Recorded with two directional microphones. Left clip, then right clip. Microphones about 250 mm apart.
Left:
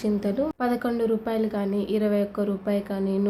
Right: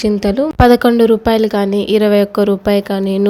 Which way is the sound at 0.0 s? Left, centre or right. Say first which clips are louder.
Right 11 dB; right.